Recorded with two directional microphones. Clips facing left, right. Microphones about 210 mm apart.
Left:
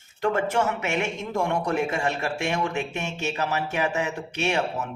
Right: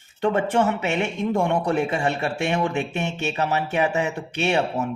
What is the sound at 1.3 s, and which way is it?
Speech, 35° right (ahead or behind).